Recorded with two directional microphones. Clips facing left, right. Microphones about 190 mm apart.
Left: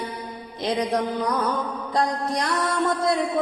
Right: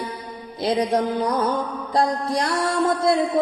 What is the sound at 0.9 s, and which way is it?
A man's voice, 30° right (ahead or behind).